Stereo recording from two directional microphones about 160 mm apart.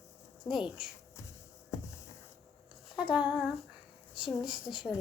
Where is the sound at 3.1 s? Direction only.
5° right (ahead or behind).